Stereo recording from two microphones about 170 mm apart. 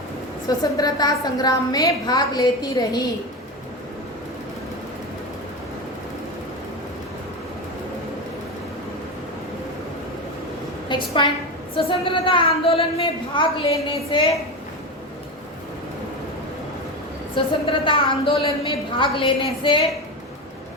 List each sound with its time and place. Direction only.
0.8 s a woman's voice: 25° left (ahead or behind)
10.8 s a woman's voice: 30° left (ahead or behind)
17.3 s a woman's voice: 30° left (ahead or behind)